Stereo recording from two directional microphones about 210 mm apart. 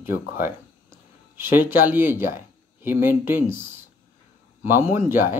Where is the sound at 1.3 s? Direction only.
10° right (ahead or behind).